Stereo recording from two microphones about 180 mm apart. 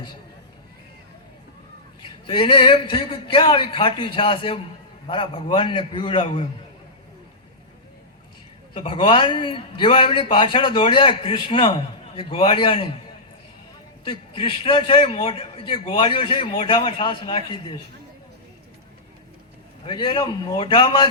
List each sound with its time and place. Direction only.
2.0 s a man's voice: 30° left (ahead or behind)
8.7 s a man's voice: 30° left (ahead or behind)
14.0 s a man's voice: 30° left (ahead or behind)
19.8 s a man's voice: 25° left (ahead or behind)